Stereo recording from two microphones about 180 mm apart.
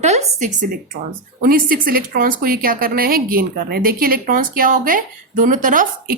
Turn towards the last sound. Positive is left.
turn(degrees=-45)  # may be behind; listen again after turning